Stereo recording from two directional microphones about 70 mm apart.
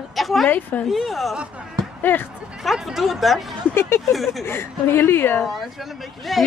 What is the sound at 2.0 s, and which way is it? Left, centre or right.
Speech, left.